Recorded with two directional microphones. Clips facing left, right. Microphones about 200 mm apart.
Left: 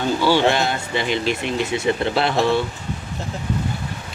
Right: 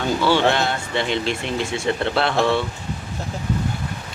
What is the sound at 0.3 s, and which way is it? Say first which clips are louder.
Speech: left 1 dB; centre (ahead or behind).